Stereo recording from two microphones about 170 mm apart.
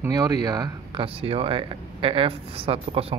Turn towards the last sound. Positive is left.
turn(degrees=-35)  # may be behind; listen again after turning